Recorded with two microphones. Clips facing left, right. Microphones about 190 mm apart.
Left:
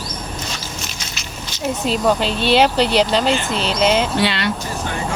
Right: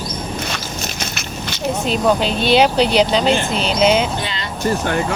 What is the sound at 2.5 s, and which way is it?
Speech, centre (ahead or behind).